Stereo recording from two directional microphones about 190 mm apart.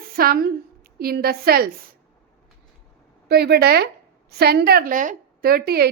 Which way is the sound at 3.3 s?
60° right (ahead or behind).